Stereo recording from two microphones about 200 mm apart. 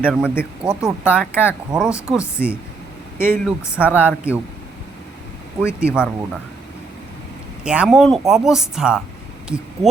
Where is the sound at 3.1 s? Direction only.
10° left (ahead or behind).